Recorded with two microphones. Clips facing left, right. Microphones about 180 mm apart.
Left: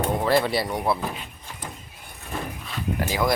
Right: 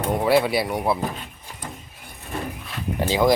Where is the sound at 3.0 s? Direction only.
25° right (ahead or behind).